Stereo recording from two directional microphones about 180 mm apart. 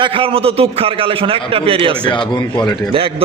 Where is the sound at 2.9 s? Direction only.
30° right (ahead or behind).